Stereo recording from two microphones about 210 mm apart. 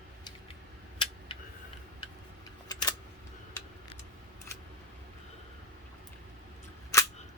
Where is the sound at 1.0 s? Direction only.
25° left (ahead or behind).